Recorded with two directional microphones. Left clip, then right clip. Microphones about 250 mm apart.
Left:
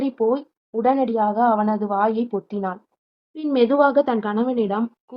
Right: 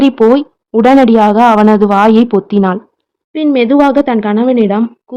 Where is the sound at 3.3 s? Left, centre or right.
Right.